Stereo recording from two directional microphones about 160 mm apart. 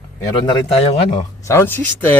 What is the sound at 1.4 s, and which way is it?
Speech, 15° left (ahead or behind).